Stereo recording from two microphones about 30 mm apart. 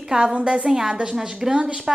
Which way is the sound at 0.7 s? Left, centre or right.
Centre.